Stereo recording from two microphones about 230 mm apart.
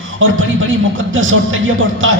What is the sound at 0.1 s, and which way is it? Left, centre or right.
A man's voice, right.